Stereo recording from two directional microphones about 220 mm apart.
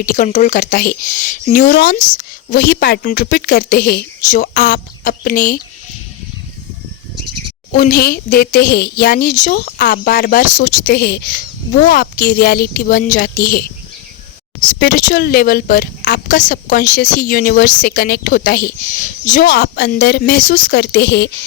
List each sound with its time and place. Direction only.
0.0 s speech: 35° left (ahead or behind)
7.7 s speech: 40° left (ahead or behind)
14.7 s speech: 40° left (ahead or behind)